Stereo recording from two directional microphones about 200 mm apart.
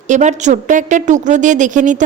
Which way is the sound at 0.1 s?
35° right (ahead or behind).